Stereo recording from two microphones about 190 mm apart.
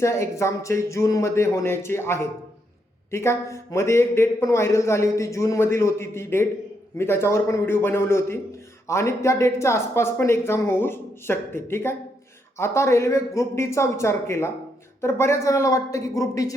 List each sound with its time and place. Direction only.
0.0 s a man's voice: 15° left (ahead or behind)